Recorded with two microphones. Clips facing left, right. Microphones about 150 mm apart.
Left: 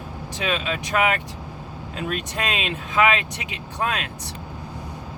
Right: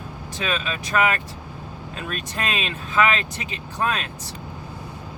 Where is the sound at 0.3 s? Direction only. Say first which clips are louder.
Left 1 dB; 20° left (ahead or behind).